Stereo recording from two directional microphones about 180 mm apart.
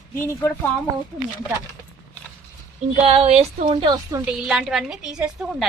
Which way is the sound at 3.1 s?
35° right (ahead or behind).